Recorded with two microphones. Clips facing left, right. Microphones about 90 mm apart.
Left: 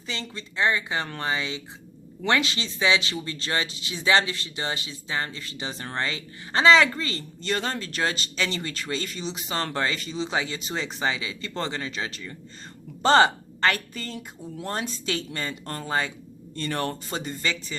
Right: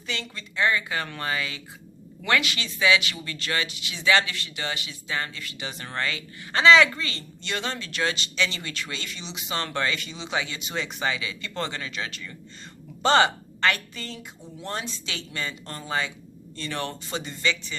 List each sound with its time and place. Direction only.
0.1 s a woman's voice: 30° left (ahead or behind)